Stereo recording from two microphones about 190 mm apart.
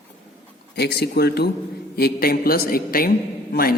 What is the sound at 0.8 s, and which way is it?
A man's voice, 60° left (ahead or behind).